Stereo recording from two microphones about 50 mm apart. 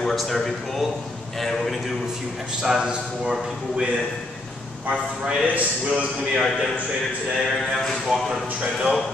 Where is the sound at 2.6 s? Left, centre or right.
Centre.